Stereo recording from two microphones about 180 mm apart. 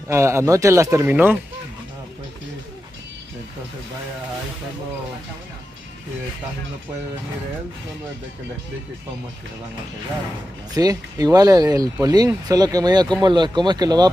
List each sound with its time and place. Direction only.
0.1 s speech: 15° right (ahead or behind)
10.7 s speech: 20° right (ahead or behind)